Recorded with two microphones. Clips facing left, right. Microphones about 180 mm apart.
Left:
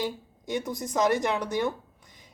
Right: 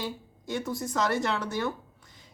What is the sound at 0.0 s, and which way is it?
A woman's voice, 15° left (ahead or behind).